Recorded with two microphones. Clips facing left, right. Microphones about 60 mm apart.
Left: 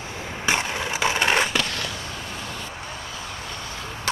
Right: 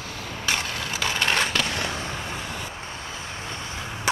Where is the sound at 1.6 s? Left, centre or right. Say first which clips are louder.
Right 2 dB; right.